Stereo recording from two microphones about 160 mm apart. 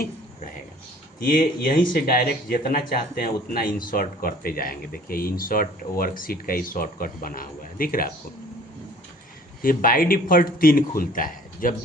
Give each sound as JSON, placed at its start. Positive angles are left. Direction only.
{"t": 1.2, "sound": "speech", "side_deg": 65}
{"t": 9.6, "sound": "speech", "side_deg": 60}